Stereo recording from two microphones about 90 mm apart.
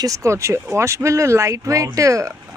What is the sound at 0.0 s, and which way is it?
Speech, 35° right (ahead or behind).